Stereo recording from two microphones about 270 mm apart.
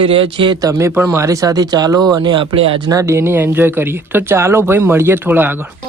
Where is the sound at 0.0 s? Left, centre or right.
Centre.